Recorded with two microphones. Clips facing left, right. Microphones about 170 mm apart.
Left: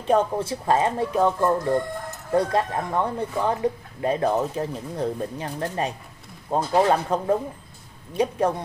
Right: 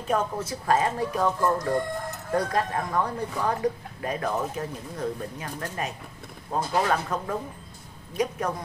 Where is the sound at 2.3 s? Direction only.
25° left (ahead or behind).